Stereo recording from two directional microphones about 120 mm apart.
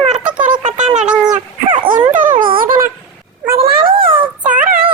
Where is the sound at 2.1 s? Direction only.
90° right.